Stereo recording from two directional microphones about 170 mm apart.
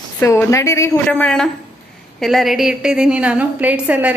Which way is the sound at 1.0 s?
5° left (ahead or behind).